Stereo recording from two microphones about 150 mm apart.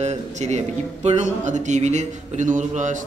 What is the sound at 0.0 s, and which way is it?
A man's voice, 50° right (ahead or behind).